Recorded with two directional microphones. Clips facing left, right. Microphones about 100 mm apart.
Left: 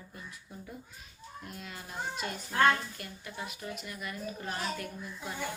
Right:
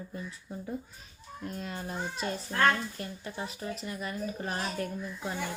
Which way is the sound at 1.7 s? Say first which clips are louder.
Left 2 dB; 35° right (ahead or behind).